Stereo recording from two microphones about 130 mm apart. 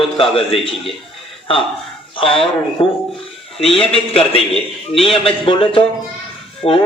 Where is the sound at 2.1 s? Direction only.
45° left (ahead or behind).